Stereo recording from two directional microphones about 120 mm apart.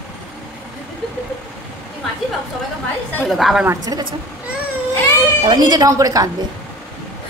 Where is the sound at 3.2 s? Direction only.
Centre (ahead or behind).